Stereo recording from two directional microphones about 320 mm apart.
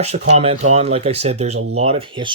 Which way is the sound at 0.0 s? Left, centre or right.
Right.